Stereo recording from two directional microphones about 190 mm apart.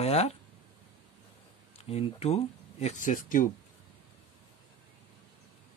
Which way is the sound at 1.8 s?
35° left (ahead or behind).